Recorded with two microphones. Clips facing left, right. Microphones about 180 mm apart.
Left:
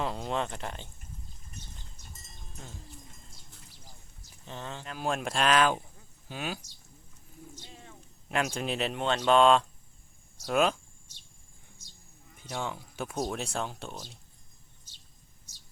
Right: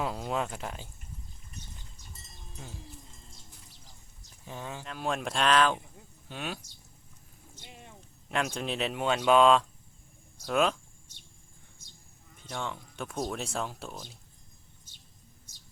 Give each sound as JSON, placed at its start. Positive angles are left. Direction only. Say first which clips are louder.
{"t": 0.0, "sound": "speech", "louder": "even", "side_deg": -5}
{"t": 4.4, "sound": "speech", "louder": "even", "side_deg": -10}
{"t": 4.9, "sound": "speech", "louder": "left 1 dB", "side_deg": 0}
{"t": 7.6, "sound": "a sound", "louder": "even", "side_deg": -15}
{"t": 8.3, "sound": "speech", "louder": "left 1 dB", "side_deg": 0}
{"t": 12.4, "sound": "speech", "louder": "left 1 dB", "side_deg": 5}